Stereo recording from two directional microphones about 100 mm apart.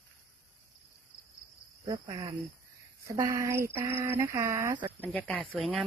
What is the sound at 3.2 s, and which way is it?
Speech, 30° right (ahead or behind).